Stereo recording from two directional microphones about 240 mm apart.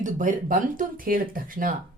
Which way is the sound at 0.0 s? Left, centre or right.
Right.